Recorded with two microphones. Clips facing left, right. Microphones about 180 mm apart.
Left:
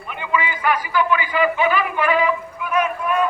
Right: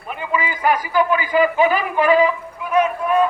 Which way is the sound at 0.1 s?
35° right (ahead or behind).